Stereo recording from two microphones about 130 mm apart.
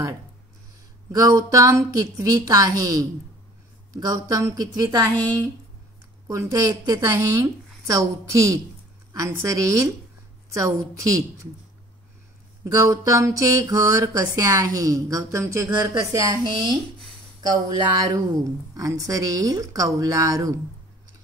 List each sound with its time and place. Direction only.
1.1 s speech: 25° right (ahead or behind)
6.2 s speech: 25° right (ahead or behind)
12.6 s speech: 25° right (ahead or behind)